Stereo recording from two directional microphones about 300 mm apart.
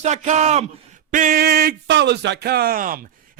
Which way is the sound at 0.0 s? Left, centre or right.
Right.